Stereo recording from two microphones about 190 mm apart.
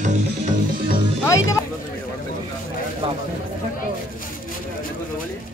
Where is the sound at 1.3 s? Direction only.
15° left (ahead or behind).